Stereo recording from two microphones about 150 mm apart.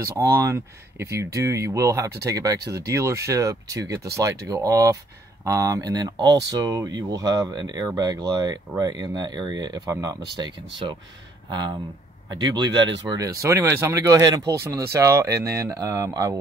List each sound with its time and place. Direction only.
0.0 s speech: 20° right (ahead or behind)
12.3 s speech: 30° right (ahead or behind)